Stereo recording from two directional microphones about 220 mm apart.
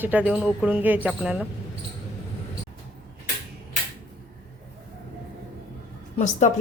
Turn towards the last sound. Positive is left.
turn(degrees=35)  # may be behind; listen again after turning